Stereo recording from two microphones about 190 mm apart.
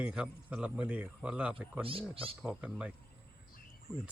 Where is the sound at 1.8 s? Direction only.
30° right (ahead or behind).